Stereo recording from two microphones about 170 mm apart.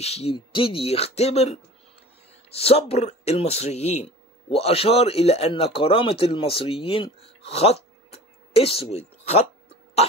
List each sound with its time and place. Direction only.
0.0 s speech: 35° left (ahead or behind)